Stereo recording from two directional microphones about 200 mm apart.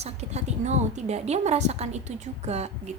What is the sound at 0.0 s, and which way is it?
A woman's voice, 35° right (ahead or behind).